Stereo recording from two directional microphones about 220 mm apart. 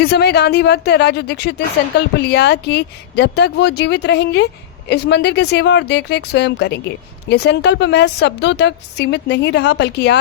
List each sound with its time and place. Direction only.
0.0 s speech: 50° left (ahead or behind)